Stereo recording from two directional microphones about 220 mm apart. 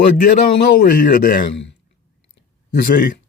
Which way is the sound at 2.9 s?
40° left (ahead or behind).